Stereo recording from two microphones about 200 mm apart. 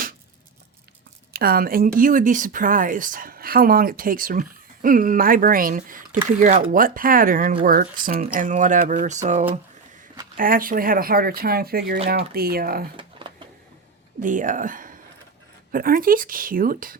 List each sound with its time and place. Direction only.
1.3 s speech: 50° right (ahead or behind)
13.0 s a sound: 25° right (ahead or behind)
14.2 s speech: 40° right (ahead or behind)